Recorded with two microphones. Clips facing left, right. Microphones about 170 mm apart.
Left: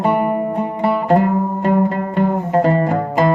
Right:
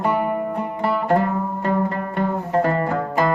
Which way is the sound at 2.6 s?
20° left (ahead or behind).